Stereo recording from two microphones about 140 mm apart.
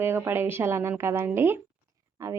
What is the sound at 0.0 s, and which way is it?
A woman's voice, 15° right (ahead or behind).